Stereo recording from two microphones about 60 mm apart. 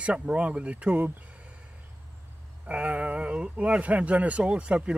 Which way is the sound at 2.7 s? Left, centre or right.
Right.